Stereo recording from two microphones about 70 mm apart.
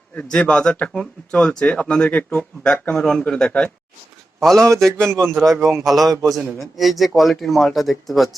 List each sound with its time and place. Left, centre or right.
0.2 s speech: centre